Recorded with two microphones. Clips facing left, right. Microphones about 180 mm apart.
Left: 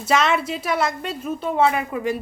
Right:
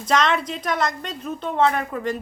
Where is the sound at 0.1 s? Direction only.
5° left (ahead or behind).